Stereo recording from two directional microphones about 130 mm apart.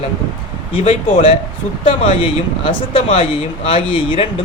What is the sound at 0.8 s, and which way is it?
Speech, 55° left (ahead or behind).